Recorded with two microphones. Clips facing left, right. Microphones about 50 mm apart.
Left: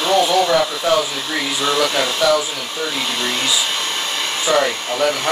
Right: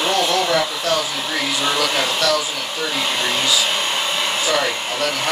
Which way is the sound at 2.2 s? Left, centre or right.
Centre.